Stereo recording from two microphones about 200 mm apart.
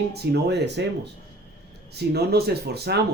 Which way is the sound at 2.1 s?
55° right (ahead or behind).